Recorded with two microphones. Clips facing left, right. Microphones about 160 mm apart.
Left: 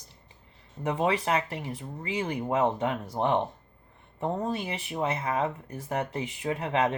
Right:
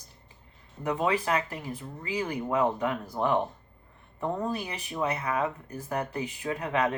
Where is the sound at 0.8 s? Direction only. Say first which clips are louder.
Left 1 dB; 25° left (ahead or behind).